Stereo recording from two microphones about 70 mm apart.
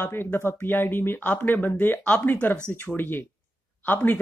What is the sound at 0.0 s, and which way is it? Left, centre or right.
Speech, left.